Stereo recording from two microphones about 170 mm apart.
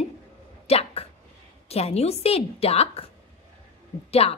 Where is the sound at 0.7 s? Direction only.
35° left (ahead or behind).